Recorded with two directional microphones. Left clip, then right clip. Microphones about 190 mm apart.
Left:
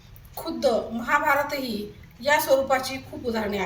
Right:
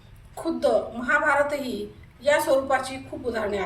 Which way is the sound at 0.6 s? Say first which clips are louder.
Even; 5° right (ahead or behind).